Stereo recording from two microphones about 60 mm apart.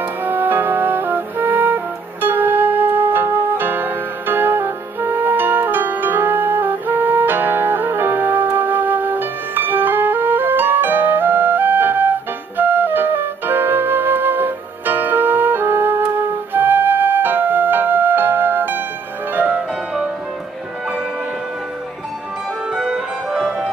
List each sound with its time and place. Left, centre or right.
0.0 s music: right
12.5 s flute: right
19.3 s music: right
22.8 s music: centre